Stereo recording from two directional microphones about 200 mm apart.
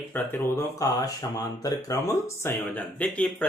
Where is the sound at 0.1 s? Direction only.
10° left (ahead or behind).